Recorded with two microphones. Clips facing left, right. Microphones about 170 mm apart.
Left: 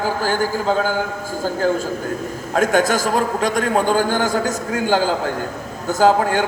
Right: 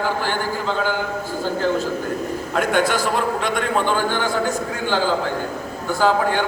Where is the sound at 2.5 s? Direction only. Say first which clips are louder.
Left 3 dB; 45° left (ahead or behind).